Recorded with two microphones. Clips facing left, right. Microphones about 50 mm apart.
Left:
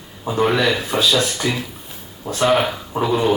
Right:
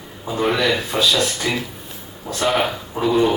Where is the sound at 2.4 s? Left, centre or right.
Centre.